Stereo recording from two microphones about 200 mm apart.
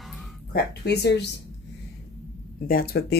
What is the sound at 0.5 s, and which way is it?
Speech, 55° left (ahead or behind).